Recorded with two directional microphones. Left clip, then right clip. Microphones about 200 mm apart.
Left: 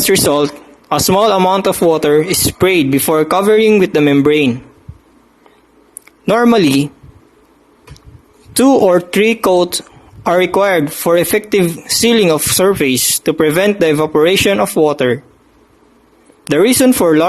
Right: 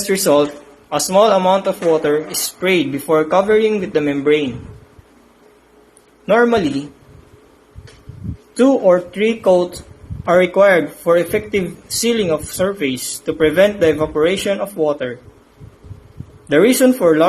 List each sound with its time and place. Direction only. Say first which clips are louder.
0.1 s speech: left 1 dB; 45° left (ahead or behind)
6.2 s speech: left 3 dB; 45° left (ahead or behind)
8.5 s speech: left 3 dB; 50° left (ahead or behind)
16.5 s speech: left 1 dB; 50° left (ahead or behind)